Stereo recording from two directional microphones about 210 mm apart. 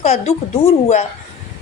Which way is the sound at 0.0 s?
30° left (ahead or behind).